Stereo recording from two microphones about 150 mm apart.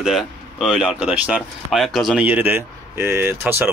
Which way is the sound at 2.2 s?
10° right (ahead or behind).